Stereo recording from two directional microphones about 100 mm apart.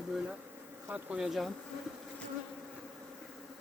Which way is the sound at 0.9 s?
15° right (ahead or behind).